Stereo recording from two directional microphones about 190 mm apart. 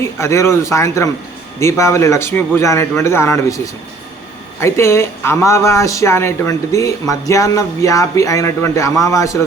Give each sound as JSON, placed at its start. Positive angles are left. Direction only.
{"t": 0.0, "sound": "speech", "side_deg": 15}
{"t": 4.6, "sound": "speech", "side_deg": 15}